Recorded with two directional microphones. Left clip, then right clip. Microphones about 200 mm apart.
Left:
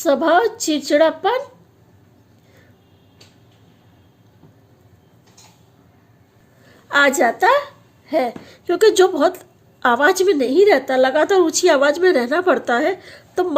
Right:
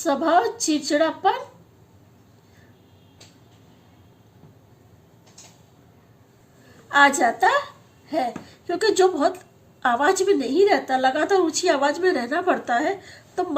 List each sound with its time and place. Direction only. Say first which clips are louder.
0.0 s a woman's voice: left 5 dB; 45° left (ahead or behind)
6.8 s a woman's voice: left 2 dB; 45° left (ahead or behind)